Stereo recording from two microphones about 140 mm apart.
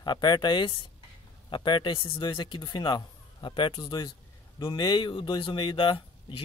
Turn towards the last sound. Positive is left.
turn(degrees=40)  # may be behind; listen again after turning